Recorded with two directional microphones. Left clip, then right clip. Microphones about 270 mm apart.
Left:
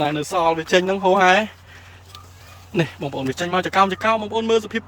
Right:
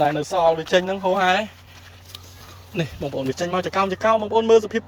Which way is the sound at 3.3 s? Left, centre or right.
Centre.